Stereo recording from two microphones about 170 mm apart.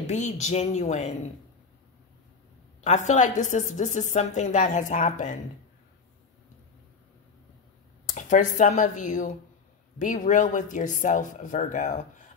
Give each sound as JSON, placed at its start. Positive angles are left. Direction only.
{"t": 0.0, "sound": "a woman's voice", "side_deg": 45}
{"t": 2.8, "sound": "a woman's voice", "side_deg": 45}
{"t": 8.1, "sound": "a woman's voice", "side_deg": 50}